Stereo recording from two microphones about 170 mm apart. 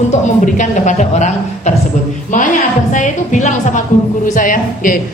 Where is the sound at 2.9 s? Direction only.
45° left (ahead or behind).